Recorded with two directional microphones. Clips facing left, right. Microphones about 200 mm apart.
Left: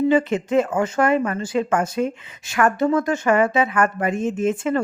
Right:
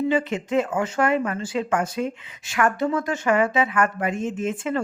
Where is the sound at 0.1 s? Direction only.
45° left (ahead or behind).